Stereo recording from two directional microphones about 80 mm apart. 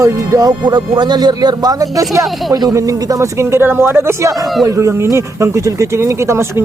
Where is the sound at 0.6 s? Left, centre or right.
Right.